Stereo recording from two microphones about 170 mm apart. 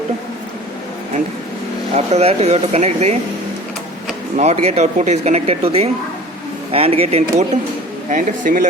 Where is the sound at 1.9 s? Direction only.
40° right (ahead or behind).